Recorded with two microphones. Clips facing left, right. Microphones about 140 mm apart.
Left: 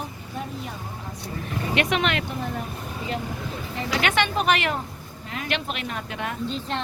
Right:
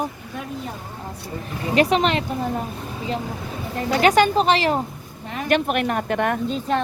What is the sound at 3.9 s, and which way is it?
Speech, 40° right (ahead or behind).